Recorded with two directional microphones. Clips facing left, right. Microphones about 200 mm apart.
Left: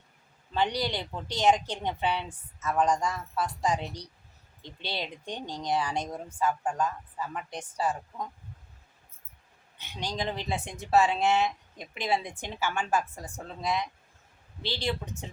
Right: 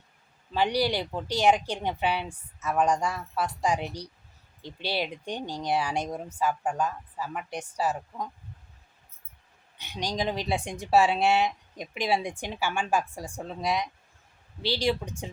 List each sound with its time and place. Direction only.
0.8 s speech: 10° right (ahead or behind)
9.7 s speech: 15° right (ahead or behind)